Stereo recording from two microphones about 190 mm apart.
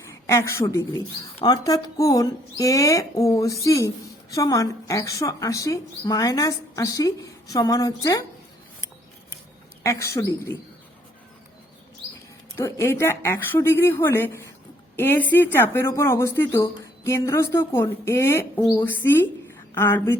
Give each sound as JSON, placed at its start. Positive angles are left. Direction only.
{"t": 0.1, "sound": "a woman's voice", "side_deg": 15}
{"t": 9.8, "sound": "speech", "side_deg": 15}
{"t": 12.5, "sound": "speech", "side_deg": 15}